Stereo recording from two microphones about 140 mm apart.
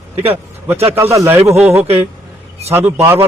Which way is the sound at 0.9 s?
20° right (ahead or behind).